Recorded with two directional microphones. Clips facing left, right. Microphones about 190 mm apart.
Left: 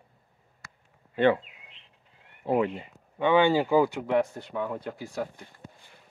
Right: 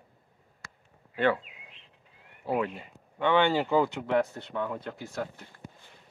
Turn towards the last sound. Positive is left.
turn(degrees=0)  # may be behind; listen again after turning